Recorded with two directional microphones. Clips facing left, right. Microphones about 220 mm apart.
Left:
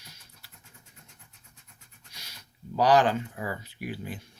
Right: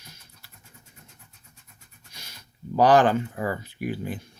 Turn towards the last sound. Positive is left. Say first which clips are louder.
# right 6 dB
turn(degrees=-50)  # may be behind; listen again after turning